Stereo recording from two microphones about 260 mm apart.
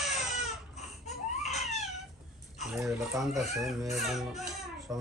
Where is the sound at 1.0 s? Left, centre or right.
Left.